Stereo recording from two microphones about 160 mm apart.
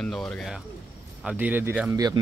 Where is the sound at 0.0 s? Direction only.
5° left (ahead or behind).